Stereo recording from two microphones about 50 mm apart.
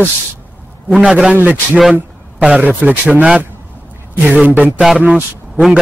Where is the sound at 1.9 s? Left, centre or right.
Right.